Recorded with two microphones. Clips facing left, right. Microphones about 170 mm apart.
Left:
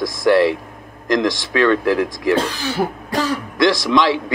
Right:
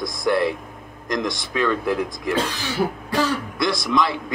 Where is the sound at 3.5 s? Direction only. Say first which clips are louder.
Left 9 dB; 90° left.